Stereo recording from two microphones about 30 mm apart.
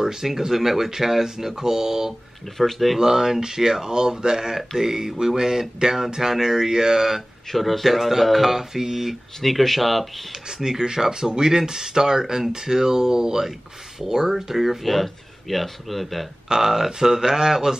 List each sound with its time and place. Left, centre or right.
0.0 s speech: centre
2.5 s speech: centre
3.0 s speech: centre
7.5 s speech: centre
9.4 s speech: centre
10.6 s speech: right; by 16.3 s centre
16.4 s speech: centre